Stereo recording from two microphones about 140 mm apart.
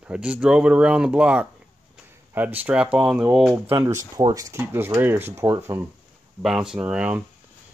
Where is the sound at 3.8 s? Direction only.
20° right (ahead or behind).